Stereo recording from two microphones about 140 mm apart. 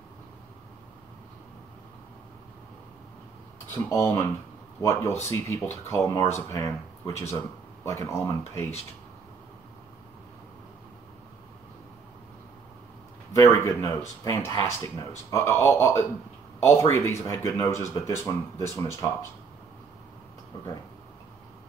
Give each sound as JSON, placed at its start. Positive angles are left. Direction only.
{"t": 3.7, "sound": "speech", "side_deg": 15}
{"t": 7.8, "sound": "speech", "side_deg": 20}
{"t": 13.3, "sound": "speech", "side_deg": 20}